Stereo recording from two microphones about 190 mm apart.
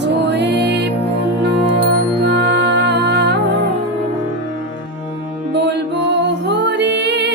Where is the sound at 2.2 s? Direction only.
60° right (ahead or behind).